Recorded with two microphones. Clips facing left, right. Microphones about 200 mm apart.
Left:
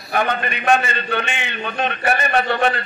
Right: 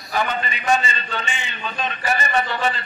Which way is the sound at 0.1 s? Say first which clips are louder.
Left 3 dB; 60° left (ahead or behind).